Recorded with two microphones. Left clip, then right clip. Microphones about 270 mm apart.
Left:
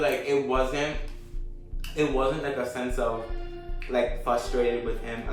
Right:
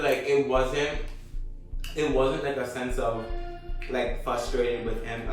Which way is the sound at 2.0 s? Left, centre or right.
Centre.